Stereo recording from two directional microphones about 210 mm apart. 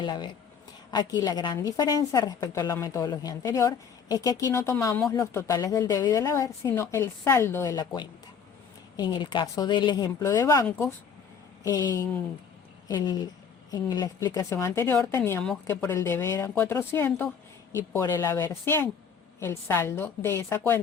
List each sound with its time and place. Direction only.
0.0 s a woman's voice: 20° left (ahead or behind)